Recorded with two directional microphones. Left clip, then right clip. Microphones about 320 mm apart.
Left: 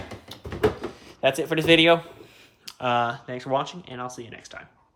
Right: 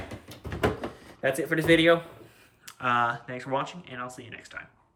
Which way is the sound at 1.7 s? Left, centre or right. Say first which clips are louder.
Left 4 dB; centre.